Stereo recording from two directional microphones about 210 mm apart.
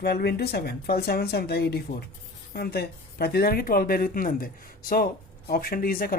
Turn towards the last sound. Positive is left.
turn(degrees=45)  # may be behind; listen again after turning